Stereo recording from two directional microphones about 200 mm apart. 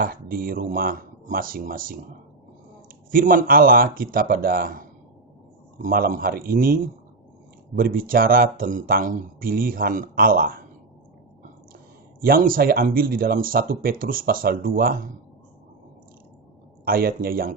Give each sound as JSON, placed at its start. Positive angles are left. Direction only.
{"t": 0.0, "sound": "speech", "side_deg": -45}
{"t": 3.1, "sound": "speech", "side_deg": -45}
{"t": 7.8, "sound": "speech", "side_deg": -45}
{"t": 12.2, "sound": "speech", "side_deg": -45}
{"t": 16.8, "sound": "speech", "side_deg": -50}